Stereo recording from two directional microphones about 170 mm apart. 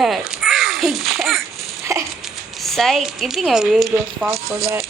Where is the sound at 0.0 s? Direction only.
Centre (ahead or behind).